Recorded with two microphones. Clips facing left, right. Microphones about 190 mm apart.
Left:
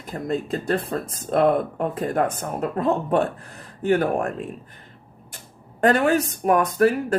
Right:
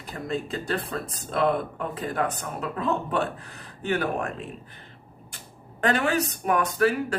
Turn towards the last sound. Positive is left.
turn(degrees=50)  # may be behind; listen again after turning